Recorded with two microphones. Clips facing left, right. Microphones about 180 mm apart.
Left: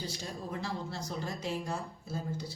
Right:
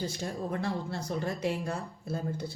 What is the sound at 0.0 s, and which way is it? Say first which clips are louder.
Speech: right 6 dB; 55° right (ahead or behind).